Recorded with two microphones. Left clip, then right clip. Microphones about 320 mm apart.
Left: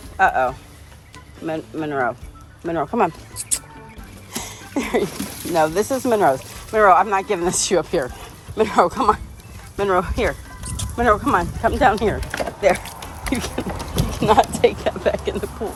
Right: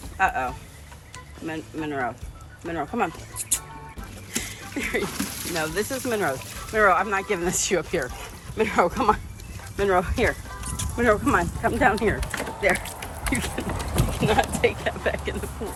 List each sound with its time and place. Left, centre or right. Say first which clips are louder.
0.2 s speech: left 7 dB; centre
4.7 s a sound: left 6 dB; centre
5.5 s speech: left 9 dB; centre